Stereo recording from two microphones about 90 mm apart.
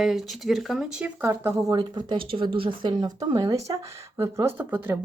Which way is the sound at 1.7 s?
60° right (ahead or behind).